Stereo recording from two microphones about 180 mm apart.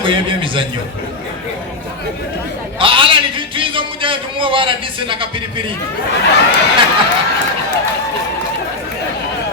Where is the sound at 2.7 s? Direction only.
30° right (ahead or behind).